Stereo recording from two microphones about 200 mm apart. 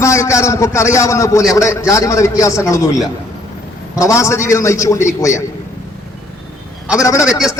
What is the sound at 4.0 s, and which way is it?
A man's voice, 15° left (ahead or behind).